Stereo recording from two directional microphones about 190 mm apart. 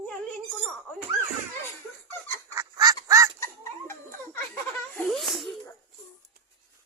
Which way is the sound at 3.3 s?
15° left (ahead or behind).